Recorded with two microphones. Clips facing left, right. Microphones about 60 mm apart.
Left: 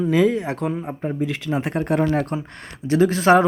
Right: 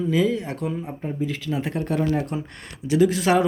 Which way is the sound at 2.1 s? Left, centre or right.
Left.